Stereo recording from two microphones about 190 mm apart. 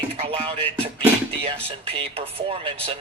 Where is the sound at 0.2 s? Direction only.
30° right (ahead or behind).